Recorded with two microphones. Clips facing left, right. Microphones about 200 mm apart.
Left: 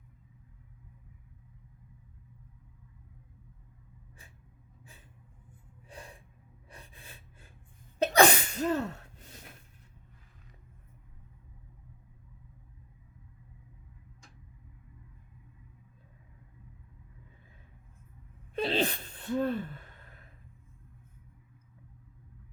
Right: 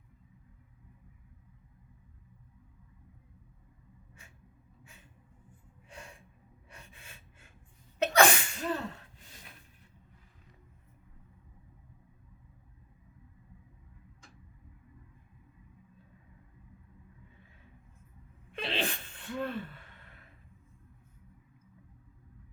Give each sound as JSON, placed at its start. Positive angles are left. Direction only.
{"t": 4.8, "sound": "a sound", "side_deg": 35}
{"t": 5.9, "sound": "gasp", "side_deg": 35}
{"t": 8.0, "sound": "sneeze", "side_deg": 35}
{"t": 18.5, "sound": "sneeze", "side_deg": 40}